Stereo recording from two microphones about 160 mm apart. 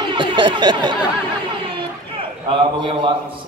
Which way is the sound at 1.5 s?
35° right (ahead or behind).